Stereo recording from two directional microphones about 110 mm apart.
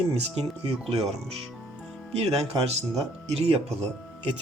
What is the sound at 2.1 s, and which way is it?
Speech, 70° right (ahead or behind).